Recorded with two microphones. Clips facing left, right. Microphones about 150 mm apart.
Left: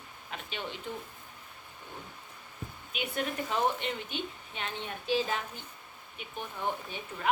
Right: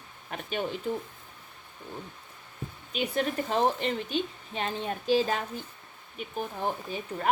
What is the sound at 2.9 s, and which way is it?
Speech, 35° right (ahead or behind).